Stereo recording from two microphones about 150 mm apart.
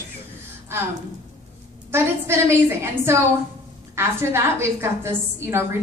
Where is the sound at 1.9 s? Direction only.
15° right (ahead or behind).